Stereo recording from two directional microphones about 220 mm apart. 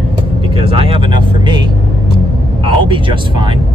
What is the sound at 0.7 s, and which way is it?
Speech, 25° right (ahead or behind).